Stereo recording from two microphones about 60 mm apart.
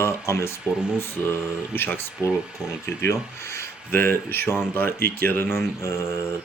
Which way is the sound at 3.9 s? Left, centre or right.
Left.